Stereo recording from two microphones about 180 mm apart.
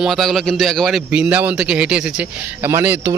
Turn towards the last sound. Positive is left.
turn(degrees=-10)  # may be behind; listen again after turning